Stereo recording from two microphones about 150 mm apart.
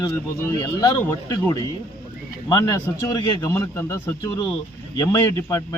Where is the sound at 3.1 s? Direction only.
20° left (ahead or behind).